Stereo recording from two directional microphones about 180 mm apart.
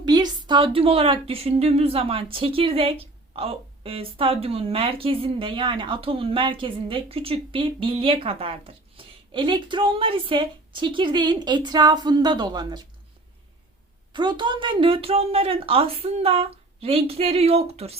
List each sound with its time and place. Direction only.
0.0 s speech: 25° right (ahead or behind)
14.1 s speech: 25° right (ahead or behind)